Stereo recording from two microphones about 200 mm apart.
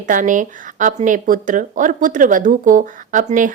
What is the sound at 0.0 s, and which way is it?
Speech, 40° right (ahead or behind).